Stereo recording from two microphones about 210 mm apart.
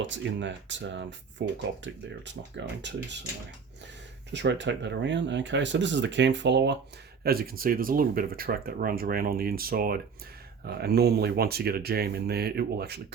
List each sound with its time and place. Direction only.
0.0 s speech: 60° right (ahead or behind)
2.5 s speech: 60° right (ahead or behind)
4.3 s speech: 55° right (ahead or behind)